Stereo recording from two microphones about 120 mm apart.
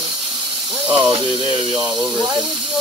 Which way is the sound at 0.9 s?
20° right (ahead or behind).